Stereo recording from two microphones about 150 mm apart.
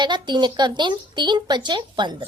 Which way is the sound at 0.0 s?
30° right (ahead or behind).